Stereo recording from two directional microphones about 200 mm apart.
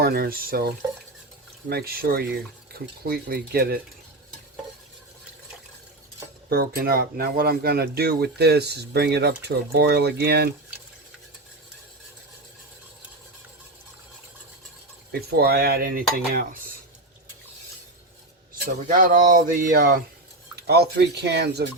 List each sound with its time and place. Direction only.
0.0 s speech: 50° right (ahead or behind)
1.7 s speech: 50° right (ahead or behind)
6.5 s speech: 50° right (ahead or behind)
15.3 s speech: 50° right (ahead or behind)
18.6 s speech: 40° right (ahead or behind)